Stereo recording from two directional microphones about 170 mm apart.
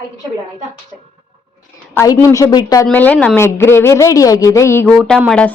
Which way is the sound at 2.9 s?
10° left (ahead or behind).